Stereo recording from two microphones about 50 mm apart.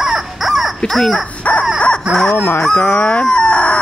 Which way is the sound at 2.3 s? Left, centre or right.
Left.